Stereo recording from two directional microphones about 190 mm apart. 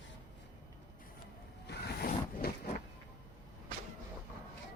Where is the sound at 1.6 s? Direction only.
55° left (ahead or behind).